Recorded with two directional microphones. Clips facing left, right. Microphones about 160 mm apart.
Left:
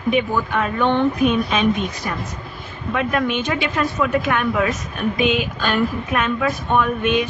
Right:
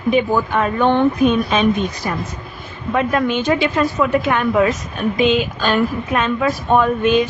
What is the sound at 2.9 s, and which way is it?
A woman's voice, 35° right (ahead or behind).